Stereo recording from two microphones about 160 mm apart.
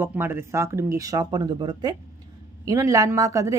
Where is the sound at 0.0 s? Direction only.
15° right (ahead or behind).